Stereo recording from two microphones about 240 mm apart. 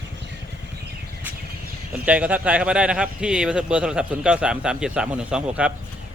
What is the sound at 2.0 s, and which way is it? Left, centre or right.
Speech, centre.